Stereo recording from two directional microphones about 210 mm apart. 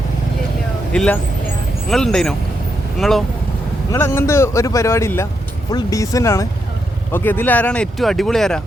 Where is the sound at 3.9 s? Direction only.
10° left (ahead or behind).